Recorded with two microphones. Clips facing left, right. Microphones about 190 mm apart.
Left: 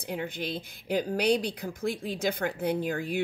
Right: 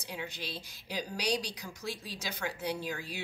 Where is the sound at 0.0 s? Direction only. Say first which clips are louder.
Left 8 dB; 55° left (ahead or behind).